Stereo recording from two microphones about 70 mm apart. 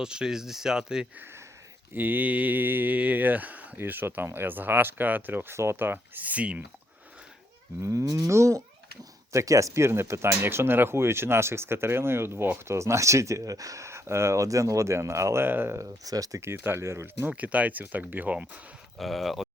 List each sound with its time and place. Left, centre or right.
0.0 s speech: centre
1.9 s speech: right
7.8 s livestock: right
9.3 s speech: right
15.8 s speech: right
16.4 s speech: right
17.2 s speech: right
18.9 s speech: centre